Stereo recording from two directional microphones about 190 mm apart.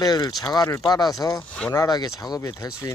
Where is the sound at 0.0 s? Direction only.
20° left (ahead or behind).